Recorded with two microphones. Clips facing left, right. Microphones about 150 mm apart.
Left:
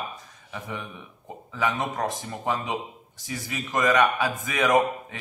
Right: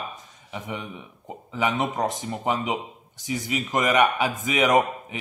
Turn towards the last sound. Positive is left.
turn(degrees=-20)  # may be behind; listen again after turning